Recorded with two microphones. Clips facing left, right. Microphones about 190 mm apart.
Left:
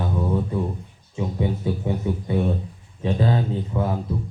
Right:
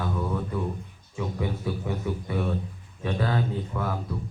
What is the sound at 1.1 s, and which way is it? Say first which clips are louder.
A man's voice: left 5 dB; 25° left (ahead or behind).